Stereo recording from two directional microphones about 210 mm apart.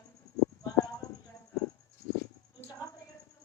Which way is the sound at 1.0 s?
15° left (ahead or behind).